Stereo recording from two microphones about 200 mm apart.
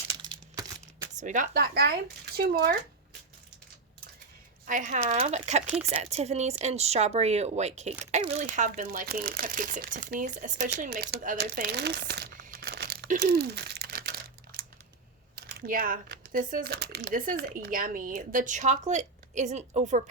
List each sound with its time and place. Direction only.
0.1 s a sound: 20° right (ahead or behind)
1.2 s speech: 40° right (ahead or behind)
4.6 s speech: 40° right (ahead or behind)
5.6 s speech: 5° right (ahead or behind)
5.9 s speech: 35° right (ahead or behind); by 13.1 s 55° right (ahead or behind)
13.1 s a sound: 50° right (ahead or behind)
15.4 s speech: 45° right (ahead or behind)